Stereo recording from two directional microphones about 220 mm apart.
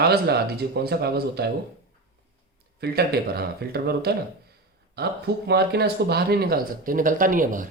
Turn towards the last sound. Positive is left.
turn(degrees=-35)  # may be behind; listen again after turning